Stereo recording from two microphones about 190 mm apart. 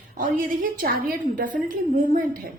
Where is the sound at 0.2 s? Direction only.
45° right (ahead or behind).